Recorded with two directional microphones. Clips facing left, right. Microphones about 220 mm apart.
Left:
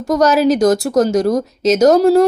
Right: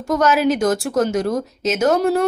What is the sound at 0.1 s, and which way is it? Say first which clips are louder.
Speech: left 4 dB; 40° left (ahead or behind).